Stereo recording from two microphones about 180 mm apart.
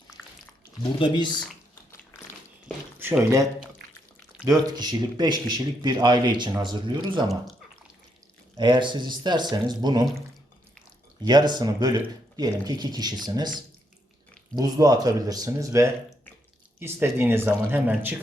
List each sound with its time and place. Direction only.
0.9 s speech: 25° left (ahead or behind)
3.0 s speech: 15° right (ahead or behind)
4.4 s speech: 20° right (ahead or behind)
8.5 s speech: 25° right (ahead or behind)
11.2 s speech: 25° right (ahead or behind)